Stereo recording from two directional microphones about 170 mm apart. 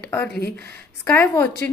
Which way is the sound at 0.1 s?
10° left (ahead or behind).